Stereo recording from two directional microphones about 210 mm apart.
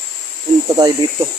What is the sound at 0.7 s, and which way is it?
Speech, 20° right (ahead or behind).